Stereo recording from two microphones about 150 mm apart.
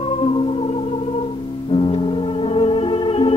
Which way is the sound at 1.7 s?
35° left (ahead or behind).